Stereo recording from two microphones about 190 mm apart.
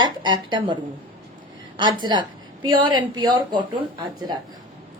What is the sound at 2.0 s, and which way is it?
A woman's voice, 25° right (ahead or behind).